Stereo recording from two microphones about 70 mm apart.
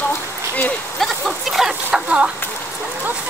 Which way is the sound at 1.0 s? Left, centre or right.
Centre.